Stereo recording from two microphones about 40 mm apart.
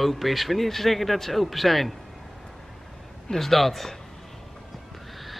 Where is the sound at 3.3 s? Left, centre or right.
Centre.